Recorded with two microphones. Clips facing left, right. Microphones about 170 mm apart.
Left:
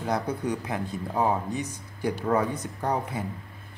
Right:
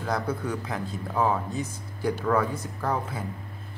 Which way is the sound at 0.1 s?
15° left (ahead or behind).